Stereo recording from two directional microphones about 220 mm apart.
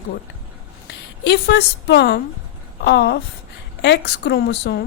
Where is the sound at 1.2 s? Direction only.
50° left (ahead or behind).